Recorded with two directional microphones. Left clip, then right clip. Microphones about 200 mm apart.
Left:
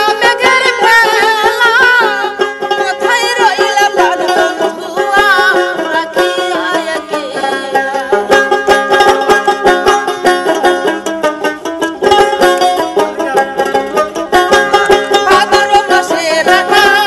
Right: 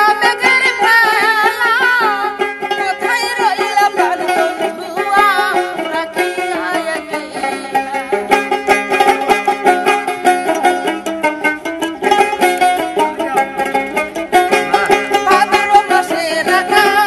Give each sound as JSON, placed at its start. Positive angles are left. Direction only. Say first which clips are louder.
{"t": 0.0, "sound": "music", "louder": "left 2 dB", "side_deg": 30}
{"t": 3.2, "sound": "music", "louder": "left 5 dB", "side_deg": 30}
{"t": 4.3, "sound": "music", "louder": "left 4 dB", "side_deg": 15}
{"t": 5.1, "sound": "music", "louder": "left 3 dB", "side_deg": 30}
{"t": 7.7, "sound": "music", "louder": "left 5 dB", "side_deg": 15}
{"t": 15.2, "sound": "music", "louder": "left 2 dB", "side_deg": 30}